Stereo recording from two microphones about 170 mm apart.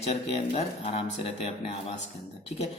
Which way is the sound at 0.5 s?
35° left (ahead or behind).